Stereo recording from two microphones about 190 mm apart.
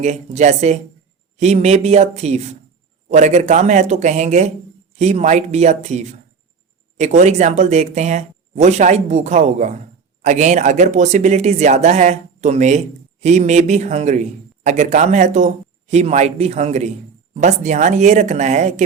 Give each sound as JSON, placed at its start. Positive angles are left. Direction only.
{"t": 0.0, "sound": "a man's voice", "side_deg": -40}